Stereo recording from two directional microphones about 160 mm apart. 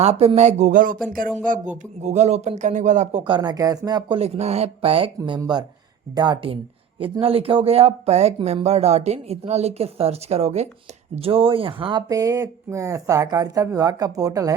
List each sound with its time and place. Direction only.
0.0 s speech: 40° right (ahead or behind); by 0.9 s 55° right (ahead or behind)
2.0 s speech: 45° right (ahead or behind); by 4.2 s 25° right (ahead or behind)
4.2 s speech: 40° right (ahead or behind); by 14.5 s 20° right (ahead or behind)